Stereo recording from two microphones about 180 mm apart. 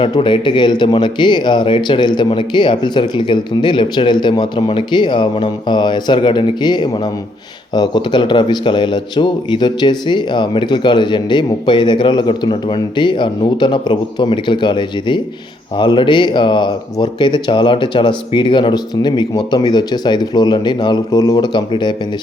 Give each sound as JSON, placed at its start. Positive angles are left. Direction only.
{"t": 0.0, "sound": "a man's voice", "side_deg": 30}